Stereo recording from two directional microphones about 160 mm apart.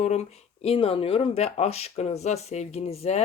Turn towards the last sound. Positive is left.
turn(degrees=40)  # may be behind; listen again after turning